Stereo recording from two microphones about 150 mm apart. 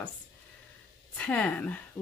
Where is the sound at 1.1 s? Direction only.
10° left (ahead or behind).